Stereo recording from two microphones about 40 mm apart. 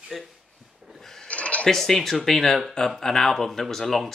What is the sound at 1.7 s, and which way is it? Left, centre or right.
Speech, centre.